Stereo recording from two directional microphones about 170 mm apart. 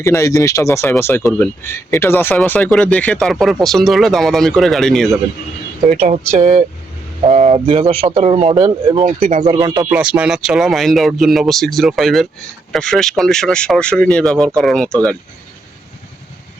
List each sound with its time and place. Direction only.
0.0 s speech: 20° left (ahead or behind); by 5.0 s centre (ahead or behind)
5.9 s a woman's voice: 45° right (ahead or behind); by 9.0 s 25° right (ahead or behind)
9.0 s a woman's voice: 45° right (ahead or behind)
9.4 s speech: 25° right (ahead or behind)
9.9 s speech: 5° right (ahead or behind)